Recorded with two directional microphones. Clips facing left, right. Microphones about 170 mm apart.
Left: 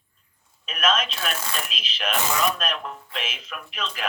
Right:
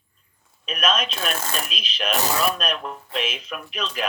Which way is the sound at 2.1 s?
40° right (ahead or behind).